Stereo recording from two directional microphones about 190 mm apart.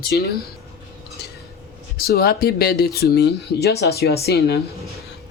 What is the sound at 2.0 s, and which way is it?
Speech, 55° left (ahead or behind).